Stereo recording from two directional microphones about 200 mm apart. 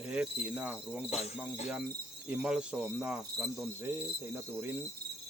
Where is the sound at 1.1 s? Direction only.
30° left (ahead or behind).